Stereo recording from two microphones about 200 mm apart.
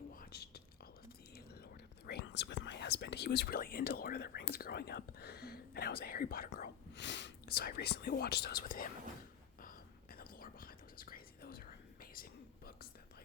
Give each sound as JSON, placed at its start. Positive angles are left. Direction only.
{"t": 0.1, "sound": "whispering", "side_deg": 50}
{"t": 1.3, "sound": "speech", "side_deg": 55}
{"t": 9.6, "sound": "whispering", "side_deg": 45}